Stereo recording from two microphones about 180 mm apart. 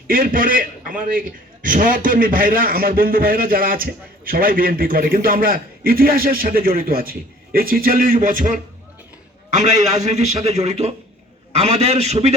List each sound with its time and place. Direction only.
0.1 s a man's voice: 50° right (ahead or behind)